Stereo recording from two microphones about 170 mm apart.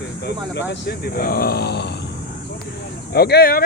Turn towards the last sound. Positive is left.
turn(degrees=65)  # may be behind; listen again after turning